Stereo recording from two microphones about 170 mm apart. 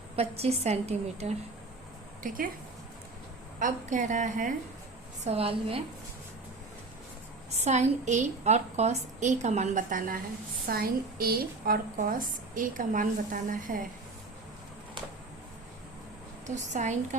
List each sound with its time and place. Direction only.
0.2 s a woman's voice: 35° right (ahead or behind)
2.2 s a woman's voice: 55° right (ahead or behind)
3.6 s a woman's voice: 50° right (ahead or behind)
5.2 s a woman's voice: 35° right (ahead or behind)
7.5 s a woman's voice: 40° right (ahead or behind)
10.7 s a woman's voice: 60° right (ahead or behind)
16.6 s a woman's voice: 45° right (ahead or behind)